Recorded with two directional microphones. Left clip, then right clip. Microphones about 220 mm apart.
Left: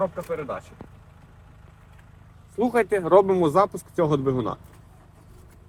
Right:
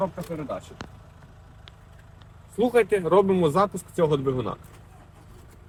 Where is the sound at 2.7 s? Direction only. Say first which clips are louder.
Right 1 dB; 40° left (ahead or behind).